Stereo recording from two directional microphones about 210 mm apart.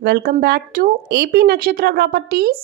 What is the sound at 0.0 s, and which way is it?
A woman's voice, 50° right (ahead or behind).